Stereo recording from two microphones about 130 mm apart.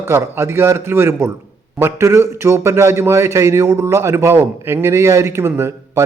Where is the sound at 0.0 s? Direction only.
20° right (ahead or behind).